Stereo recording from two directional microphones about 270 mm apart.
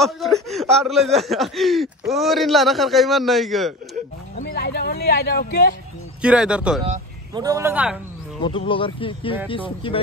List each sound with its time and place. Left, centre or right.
0.0 s speech: centre
4.4 s speech: left
6.2 s speech: centre
6.9 s a man's voice: centre
8.4 s speech: centre